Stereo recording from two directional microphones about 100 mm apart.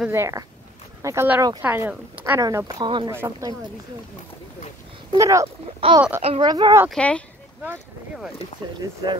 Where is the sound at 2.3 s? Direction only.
35° right (ahead or behind).